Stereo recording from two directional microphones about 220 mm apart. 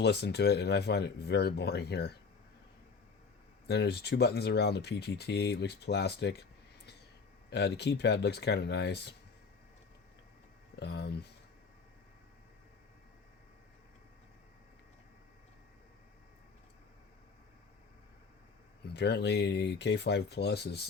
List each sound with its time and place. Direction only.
0.0 s speech: 50° left (ahead or behind)
3.7 s speech: 50° left (ahead or behind)
7.5 s speech: 50° left (ahead or behind)
10.8 s speech: 50° left (ahead or behind)
18.9 s speech: 50° left (ahead or behind)